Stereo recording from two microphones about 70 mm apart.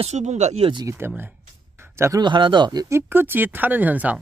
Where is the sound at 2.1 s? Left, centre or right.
Right.